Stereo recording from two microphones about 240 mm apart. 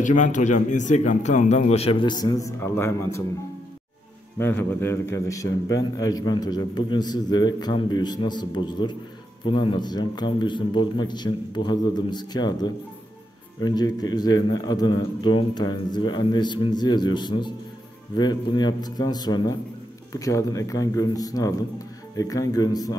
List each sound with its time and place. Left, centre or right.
0.0 s speech: left; by 3.3 s centre
4.4 s a man's voice: centre